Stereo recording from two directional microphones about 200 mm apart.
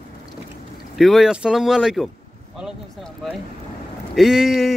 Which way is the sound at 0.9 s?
Centre (ahead or behind).